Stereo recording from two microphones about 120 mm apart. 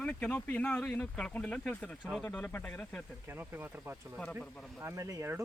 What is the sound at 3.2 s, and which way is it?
Speech, 15° right (ahead or behind).